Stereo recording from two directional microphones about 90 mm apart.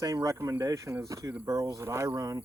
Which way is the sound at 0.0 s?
40° right (ahead or behind).